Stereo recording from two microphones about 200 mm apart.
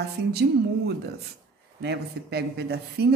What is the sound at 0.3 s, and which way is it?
Speech, 55° right (ahead or behind).